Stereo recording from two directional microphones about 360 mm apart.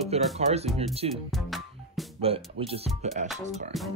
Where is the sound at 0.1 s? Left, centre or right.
Centre.